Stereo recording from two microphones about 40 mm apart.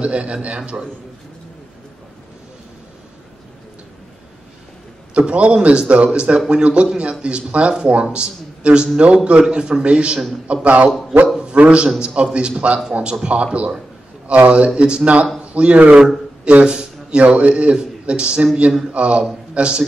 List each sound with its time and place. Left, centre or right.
0.0 s speech: right
5.1 s a man's voice: right
10.5 s speech: right
10.9 s a man's voice: centre
11.5 s a man's voice: right
16.6 s a sound: right
17.2 s a man's voice: right